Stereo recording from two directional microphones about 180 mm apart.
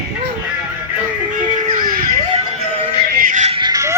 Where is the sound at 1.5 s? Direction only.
30° right (ahead or behind).